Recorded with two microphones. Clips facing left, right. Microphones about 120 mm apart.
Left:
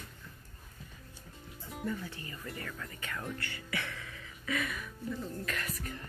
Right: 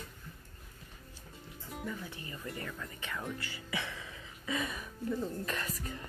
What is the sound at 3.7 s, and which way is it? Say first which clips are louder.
Speech: right 1 dB; 20° right (ahead or behind).